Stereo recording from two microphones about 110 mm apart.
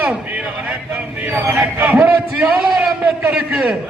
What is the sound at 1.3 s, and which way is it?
Speech, 15° right (ahead or behind).